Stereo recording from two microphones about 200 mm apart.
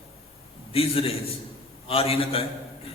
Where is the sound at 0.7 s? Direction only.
30° left (ahead or behind).